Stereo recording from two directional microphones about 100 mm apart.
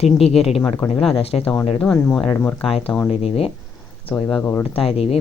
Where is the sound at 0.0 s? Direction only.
90° left.